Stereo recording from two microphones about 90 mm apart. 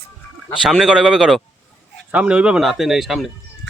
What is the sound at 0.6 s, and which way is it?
Speech, 5° right (ahead or behind).